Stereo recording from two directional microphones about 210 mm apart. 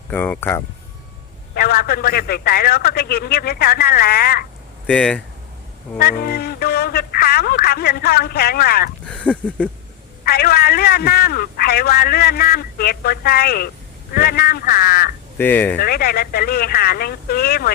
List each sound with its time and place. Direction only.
0.1 s speech: 10° left (ahead or behind)
1.5 s a man's voice: 45° left (ahead or behind)
4.9 s a sound: 5° left (ahead or behind)
6.0 s speech: 45° left (ahead or behind)
9.0 s a sound: 5° left (ahead or behind)
10.2 s a man's voice: 45° left (ahead or behind)
15.4 s speech: 10° left (ahead or behind)
15.8 s a man's voice: 45° left (ahead or behind)